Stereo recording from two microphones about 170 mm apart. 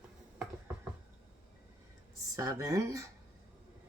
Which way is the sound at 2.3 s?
20° right (ahead or behind).